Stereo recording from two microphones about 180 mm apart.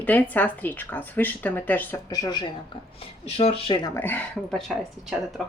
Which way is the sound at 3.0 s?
35° left (ahead or behind).